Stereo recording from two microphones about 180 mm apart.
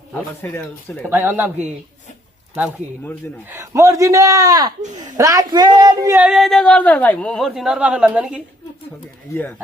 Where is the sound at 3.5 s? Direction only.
15° right (ahead or behind).